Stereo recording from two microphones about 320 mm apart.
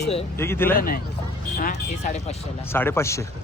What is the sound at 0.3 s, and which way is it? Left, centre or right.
Speech, centre.